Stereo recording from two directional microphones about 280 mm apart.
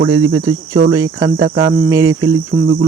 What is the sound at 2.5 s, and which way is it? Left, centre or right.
Cricket, right.